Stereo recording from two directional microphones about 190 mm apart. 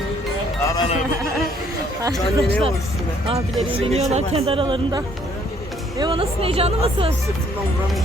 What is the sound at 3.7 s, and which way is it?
Speech, 35° right (ahead or behind).